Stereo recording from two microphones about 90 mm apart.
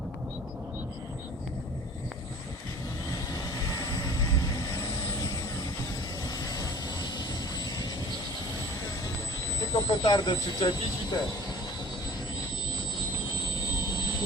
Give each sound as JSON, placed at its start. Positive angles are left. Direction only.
{"t": 3.1, "sound": "vehicle", "side_deg": 45}
{"t": 9.7, "sound": "speech", "side_deg": 50}